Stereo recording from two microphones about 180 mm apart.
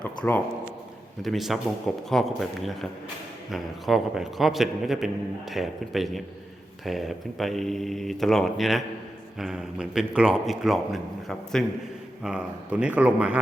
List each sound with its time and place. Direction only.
0.2 s a man's voice: 5° left (ahead or behind)